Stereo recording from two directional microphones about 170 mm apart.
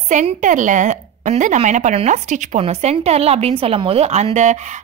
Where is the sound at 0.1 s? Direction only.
50° right (ahead or behind).